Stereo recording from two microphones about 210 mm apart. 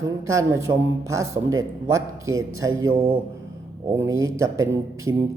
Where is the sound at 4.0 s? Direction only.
15° right (ahead or behind).